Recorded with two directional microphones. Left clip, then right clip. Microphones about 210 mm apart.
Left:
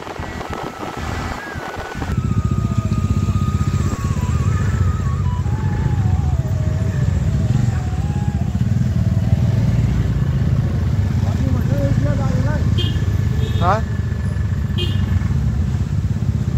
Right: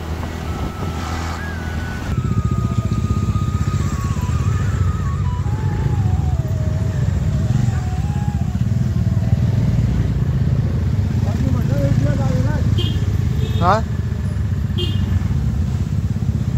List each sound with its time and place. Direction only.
13.6 s vehicle: 15° right (ahead or behind)